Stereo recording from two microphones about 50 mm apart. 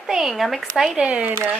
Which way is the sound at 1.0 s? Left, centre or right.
Right.